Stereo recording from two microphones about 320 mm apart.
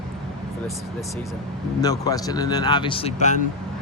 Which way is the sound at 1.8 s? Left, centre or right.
Centre.